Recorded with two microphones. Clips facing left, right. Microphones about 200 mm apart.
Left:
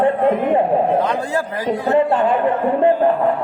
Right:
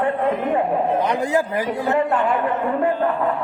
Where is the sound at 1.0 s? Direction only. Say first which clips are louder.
Even; 15° right (ahead or behind).